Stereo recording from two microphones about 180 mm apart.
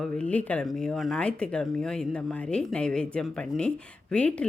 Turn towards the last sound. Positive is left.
turn(degrees=5)  # may be behind; listen again after turning